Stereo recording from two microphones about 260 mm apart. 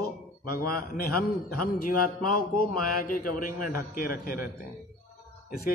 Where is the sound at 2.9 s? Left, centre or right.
Left.